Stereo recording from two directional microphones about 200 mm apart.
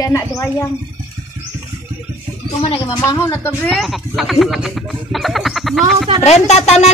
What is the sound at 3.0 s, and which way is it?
Speech, 15° left (ahead or behind).